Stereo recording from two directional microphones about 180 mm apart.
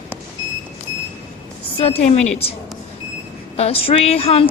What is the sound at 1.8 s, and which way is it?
Speech, 35° left (ahead or behind).